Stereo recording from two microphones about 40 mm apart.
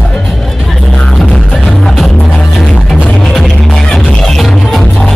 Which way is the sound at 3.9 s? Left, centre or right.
Left.